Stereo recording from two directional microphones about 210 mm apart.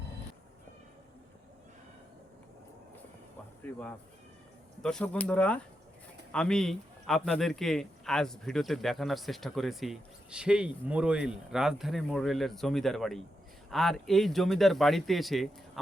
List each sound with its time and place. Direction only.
3.7 s a man's voice: 10° left (ahead or behind)